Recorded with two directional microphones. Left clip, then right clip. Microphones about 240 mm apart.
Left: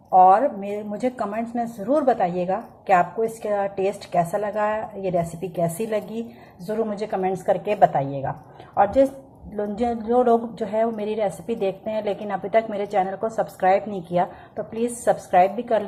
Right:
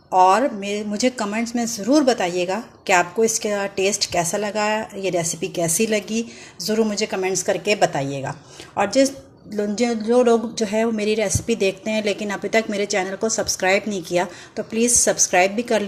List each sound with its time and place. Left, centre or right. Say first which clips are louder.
0.1 s a woman's voice: left 1 dB; right